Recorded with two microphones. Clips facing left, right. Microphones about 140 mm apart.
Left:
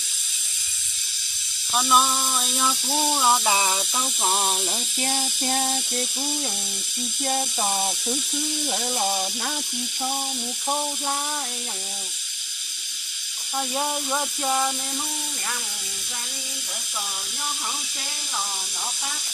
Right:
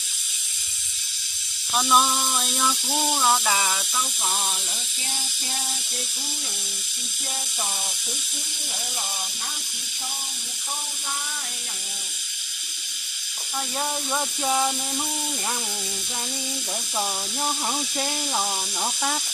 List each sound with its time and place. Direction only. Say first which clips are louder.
1.7 s speech: even; centre (ahead or behind); by 4.5 s 35° left (ahead or behind)
5.0 s a sound: left 10 dB; 60° left (ahead or behind)
13.7 s speech: even; 5° left (ahead or behind)